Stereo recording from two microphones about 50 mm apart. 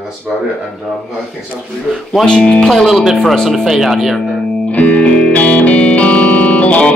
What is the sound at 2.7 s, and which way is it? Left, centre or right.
Speech, centre.